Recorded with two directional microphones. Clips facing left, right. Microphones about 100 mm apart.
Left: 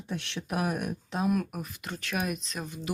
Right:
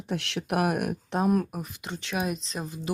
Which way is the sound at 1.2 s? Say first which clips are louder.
Right 4 dB; 40° right (ahead or behind).